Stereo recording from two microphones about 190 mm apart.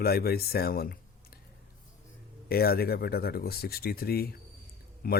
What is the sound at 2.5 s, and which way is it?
Speech, 55° left (ahead or behind).